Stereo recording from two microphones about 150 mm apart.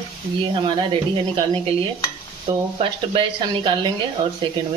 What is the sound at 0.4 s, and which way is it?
Speech, 35° right (ahead or behind).